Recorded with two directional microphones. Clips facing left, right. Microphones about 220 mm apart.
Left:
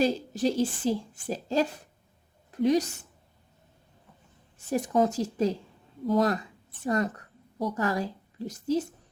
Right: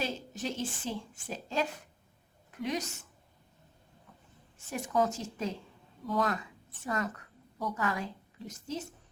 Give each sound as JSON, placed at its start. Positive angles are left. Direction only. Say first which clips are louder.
{"t": 0.0, "sound": "a woman's voice", "louder": "left 10 dB", "side_deg": 35}
{"t": 4.5, "sound": "a woman's voice", "louder": "left 6 dB", "side_deg": 35}